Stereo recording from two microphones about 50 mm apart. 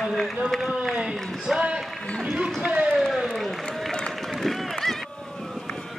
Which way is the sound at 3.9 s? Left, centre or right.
Centre.